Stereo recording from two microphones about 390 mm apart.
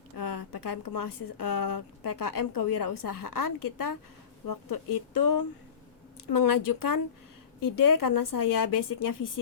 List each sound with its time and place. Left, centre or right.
0.2 s speech: left